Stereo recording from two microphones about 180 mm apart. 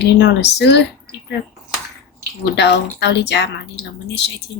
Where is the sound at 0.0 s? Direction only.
70° left (ahead or behind).